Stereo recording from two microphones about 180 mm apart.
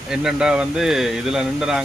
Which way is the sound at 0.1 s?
5° right (ahead or behind).